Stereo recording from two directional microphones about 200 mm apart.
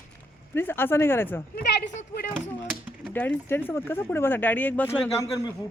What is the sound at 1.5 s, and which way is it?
Speech, 50° left (ahead or behind).